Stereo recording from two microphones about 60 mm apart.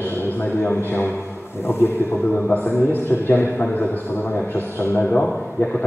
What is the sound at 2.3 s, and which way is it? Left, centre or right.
A man's voice, left.